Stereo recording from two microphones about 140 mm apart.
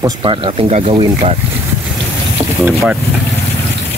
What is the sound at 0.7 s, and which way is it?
Speech, 50° right (ahead or behind).